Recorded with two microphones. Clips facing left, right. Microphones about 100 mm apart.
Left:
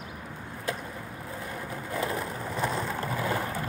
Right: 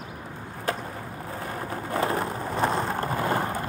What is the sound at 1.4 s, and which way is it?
Vehicle, 60° right (ahead or behind).